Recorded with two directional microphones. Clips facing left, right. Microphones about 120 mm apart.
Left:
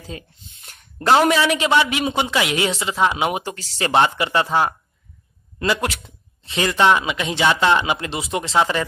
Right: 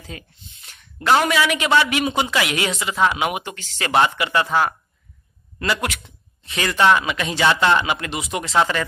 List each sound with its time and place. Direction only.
0.1 s speech: 30° left (ahead or behind)
0.6 s a sound: 45° left (ahead or behind)
1.3 s speech: 30° left (ahead or behind)